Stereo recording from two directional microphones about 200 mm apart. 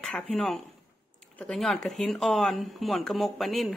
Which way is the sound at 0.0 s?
5° left (ahead or behind).